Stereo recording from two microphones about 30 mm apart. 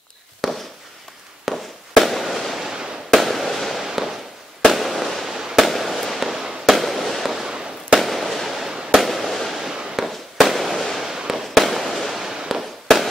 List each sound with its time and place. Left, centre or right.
0.4 s fireworks: centre
3.8 s fireworks: centre
4.6 s fireworks: centre
7.3 s fireworks: right
8.0 s fireworks: centre
8.6 s fireworks: centre
9.0 s fireworks: centre
9.6 s fireworks: centre
9.9 s fireworks: centre
12.2 s fireworks: centre